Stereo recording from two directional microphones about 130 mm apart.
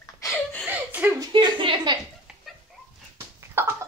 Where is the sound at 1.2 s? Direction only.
35° right (ahead or behind).